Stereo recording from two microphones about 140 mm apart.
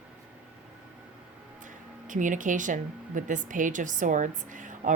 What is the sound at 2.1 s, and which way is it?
Speech, 65° right (ahead or behind).